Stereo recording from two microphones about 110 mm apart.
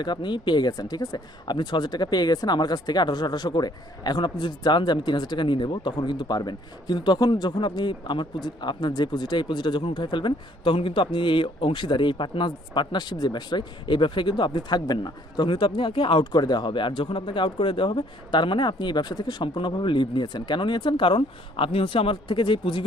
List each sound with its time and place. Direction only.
0.0 s speech: 45° left (ahead or behind)